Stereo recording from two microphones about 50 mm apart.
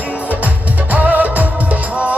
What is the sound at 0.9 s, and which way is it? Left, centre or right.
Music, right.